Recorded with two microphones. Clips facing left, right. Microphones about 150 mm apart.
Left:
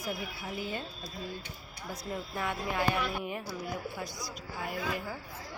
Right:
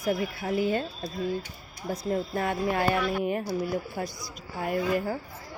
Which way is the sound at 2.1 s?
45° right (ahead or behind).